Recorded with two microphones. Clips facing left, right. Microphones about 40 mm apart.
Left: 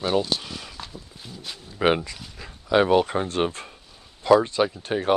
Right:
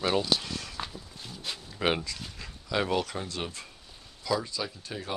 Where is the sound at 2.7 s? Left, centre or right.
Left.